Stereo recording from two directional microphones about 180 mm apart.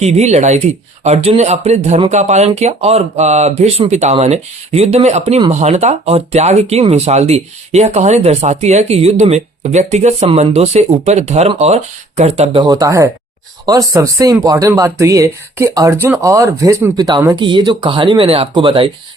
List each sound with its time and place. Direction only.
0.0 s speech: 35° right (ahead or behind)
12.6 s speech: 20° right (ahead or behind)